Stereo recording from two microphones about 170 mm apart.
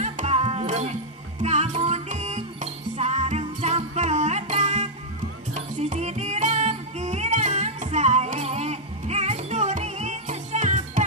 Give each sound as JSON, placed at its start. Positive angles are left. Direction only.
{"t": 0.0, "sound": "music", "side_deg": -40}